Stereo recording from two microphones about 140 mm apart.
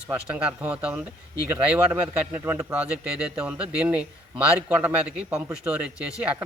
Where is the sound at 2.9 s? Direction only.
10° right (ahead or behind).